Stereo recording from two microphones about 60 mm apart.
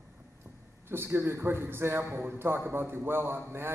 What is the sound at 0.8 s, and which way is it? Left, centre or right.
A man's voice, right.